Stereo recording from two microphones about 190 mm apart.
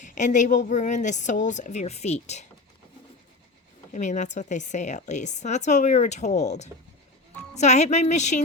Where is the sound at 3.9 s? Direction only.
40° left (ahead or behind).